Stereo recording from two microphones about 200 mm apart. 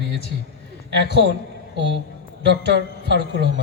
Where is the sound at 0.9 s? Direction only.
60° right (ahead or behind).